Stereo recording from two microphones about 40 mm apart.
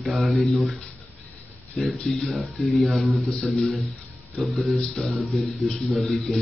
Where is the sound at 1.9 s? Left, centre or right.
Centre.